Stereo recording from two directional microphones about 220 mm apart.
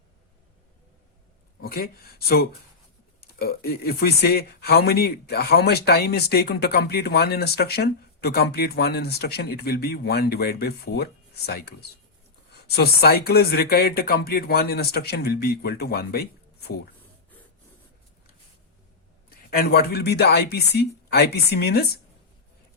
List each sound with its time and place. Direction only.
1.6 s speech: 45° left (ahead or behind)
19.5 s speech: 45° left (ahead or behind)